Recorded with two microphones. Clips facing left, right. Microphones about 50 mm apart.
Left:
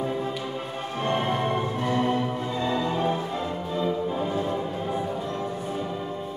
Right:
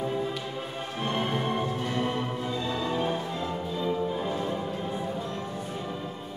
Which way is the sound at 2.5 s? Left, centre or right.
Left.